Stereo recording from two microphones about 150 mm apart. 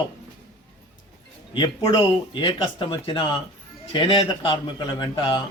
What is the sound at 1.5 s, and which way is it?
A man's voice, 30° left (ahead or behind).